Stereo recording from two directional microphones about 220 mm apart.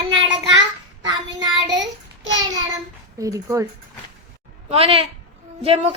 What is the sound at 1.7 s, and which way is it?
Child singing, 55° right (ahead or behind).